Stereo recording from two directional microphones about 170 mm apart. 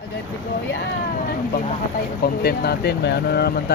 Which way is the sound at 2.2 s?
70° left (ahead or behind).